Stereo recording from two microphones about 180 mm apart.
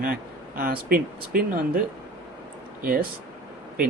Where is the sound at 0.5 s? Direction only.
55° right (ahead or behind).